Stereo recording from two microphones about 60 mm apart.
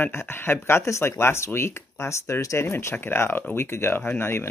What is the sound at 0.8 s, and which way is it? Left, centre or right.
Speech, left.